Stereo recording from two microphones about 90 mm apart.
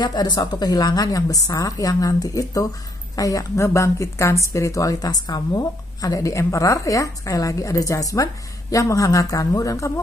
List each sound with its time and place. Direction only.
0.0 s a woman's voice: 50° left (ahead or behind)